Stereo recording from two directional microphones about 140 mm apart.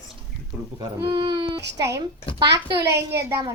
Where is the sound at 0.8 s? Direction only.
35° right (ahead or behind).